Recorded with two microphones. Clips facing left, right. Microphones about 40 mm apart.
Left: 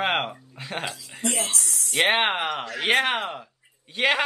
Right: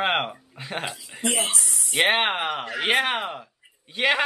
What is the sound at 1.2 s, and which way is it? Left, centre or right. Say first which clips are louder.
Speech: right 2 dB; centre.